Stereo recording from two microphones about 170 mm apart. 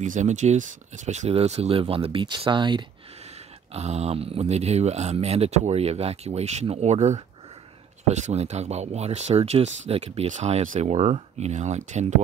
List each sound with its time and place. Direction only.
0.0 s speech: 45° right (ahead or behind); by 2.9 s 25° right (ahead or behind)
3.7 s speech: 40° right (ahead or behind)